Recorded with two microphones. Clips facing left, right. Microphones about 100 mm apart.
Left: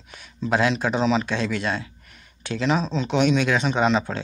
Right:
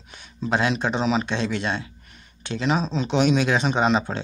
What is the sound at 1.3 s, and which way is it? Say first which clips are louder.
Speech: even; 25° right (ahead or behind).